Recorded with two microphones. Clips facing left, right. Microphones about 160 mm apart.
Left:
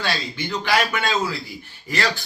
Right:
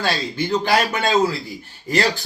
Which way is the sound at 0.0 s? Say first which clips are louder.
Right 4 dB; 40° right (ahead or behind).